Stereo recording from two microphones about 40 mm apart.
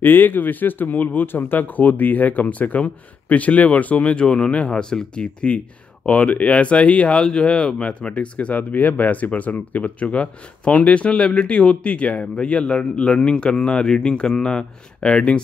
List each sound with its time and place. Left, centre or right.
0.0 s speech: left
8.7 s speech: left